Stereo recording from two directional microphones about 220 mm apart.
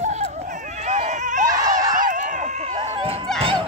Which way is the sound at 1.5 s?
15° right (ahead or behind).